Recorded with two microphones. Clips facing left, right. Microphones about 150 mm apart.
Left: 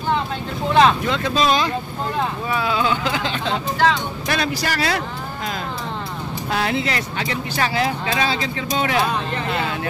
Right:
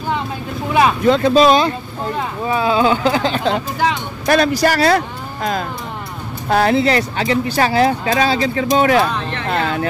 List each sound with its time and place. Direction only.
1.0 s speech: 35° right (ahead or behind)